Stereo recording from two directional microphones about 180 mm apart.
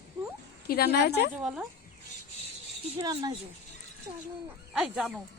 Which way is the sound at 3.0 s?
25° right (ahead or behind).